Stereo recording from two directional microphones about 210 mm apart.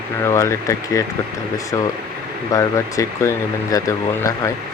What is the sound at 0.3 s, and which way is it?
Speech, 15° left (ahead or behind).